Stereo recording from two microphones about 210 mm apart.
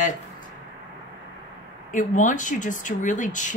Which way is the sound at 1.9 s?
40° left (ahead or behind).